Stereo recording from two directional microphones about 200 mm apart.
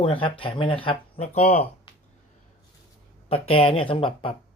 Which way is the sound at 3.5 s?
30° left (ahead or behind).